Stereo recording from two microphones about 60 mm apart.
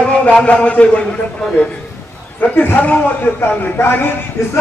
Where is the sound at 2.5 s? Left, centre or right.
Left.